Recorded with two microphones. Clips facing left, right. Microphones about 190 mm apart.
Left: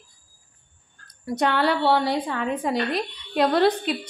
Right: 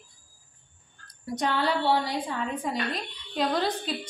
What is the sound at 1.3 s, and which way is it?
A woman's voice, 65° left (ahead or behind).